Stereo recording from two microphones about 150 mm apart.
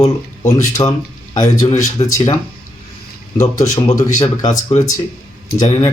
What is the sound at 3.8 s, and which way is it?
Speech, 55° left (ahead or behind).